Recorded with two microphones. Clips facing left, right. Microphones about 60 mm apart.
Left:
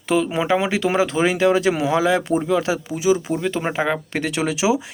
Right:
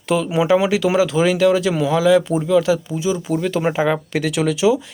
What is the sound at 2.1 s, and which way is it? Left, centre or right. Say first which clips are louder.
Speech: right 5 dB; left.